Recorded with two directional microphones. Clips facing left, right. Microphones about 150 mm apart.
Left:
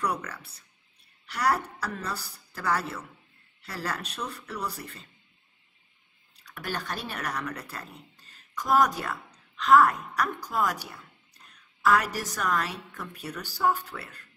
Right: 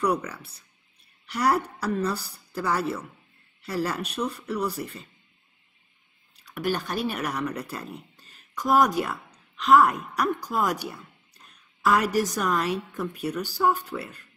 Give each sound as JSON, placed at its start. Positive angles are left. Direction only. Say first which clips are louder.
{"t": 0.0, "sound": "speech", "louder": "right 5 dB", "side_deg": -15}
{"t": 6.5, "sound": "speech", "louder": "right 7 dB", "side_deg": -15}